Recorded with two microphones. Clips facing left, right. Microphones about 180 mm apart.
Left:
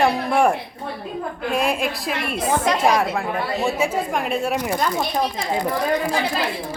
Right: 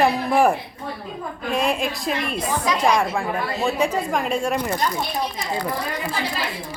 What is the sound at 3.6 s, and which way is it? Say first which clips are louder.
A woman's voice: right 2 dB; 5° left (ahead or behind).